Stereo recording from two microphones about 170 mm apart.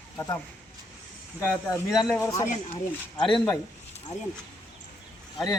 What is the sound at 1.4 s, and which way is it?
Speech, 15° left (ahead or behind).